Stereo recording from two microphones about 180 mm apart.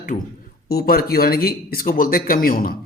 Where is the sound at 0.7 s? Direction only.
60° left (ahead or behind).